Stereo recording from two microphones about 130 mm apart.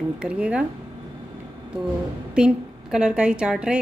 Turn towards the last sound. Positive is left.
turn(degrees=-5)  # may be behind; listen again after turning